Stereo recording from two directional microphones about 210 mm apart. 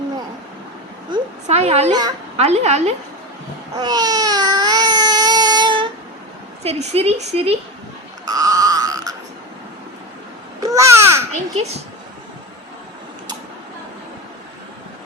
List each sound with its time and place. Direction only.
1.1 s a sound: 30° right (ahead or behind)
2.4 s a child's voice: 30° right (ahead or behind)
3.8 s baby cry: 20° right (ahead or behind)
6.6 s a woman's voice: 30° right (ahead or behind)
8.3 s a sound: 15° right (ahead or behind)
10.6 s babbling: 15° right (ahead or behind)
11.3 s a child's voice: 30° right (ahead or behind)